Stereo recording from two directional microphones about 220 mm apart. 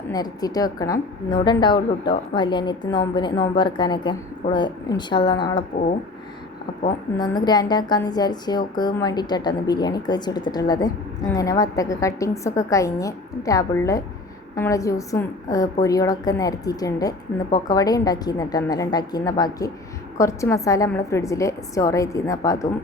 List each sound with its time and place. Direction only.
0.1 s a woman's voice: 15° left (ahead or behind)
7.2 s a woman's voice: 20° left (ahead or behind)